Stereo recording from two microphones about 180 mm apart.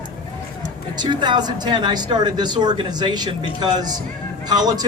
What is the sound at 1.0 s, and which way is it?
Speech, 25° right (ahead or behind).